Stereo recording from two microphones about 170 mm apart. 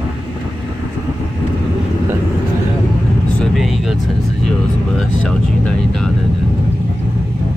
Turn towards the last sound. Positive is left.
turn(degrees=5)  # may be behind; listen again after turning